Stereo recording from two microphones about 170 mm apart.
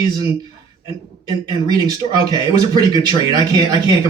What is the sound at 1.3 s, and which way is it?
Speech, 25° right (ahead or behind).